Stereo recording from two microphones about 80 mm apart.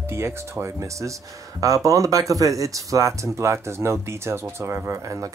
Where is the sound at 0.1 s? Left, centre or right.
Right.